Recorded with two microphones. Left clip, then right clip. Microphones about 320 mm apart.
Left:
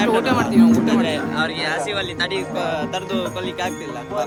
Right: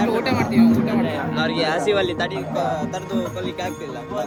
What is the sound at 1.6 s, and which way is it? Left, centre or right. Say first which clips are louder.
Speech: right 3 dB; centre.